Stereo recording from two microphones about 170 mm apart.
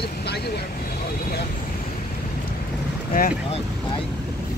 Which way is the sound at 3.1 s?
60° left (ahead or behind).